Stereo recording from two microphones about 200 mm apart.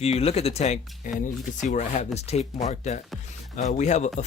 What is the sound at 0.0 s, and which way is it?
Speech, 30° left (ahead or behind).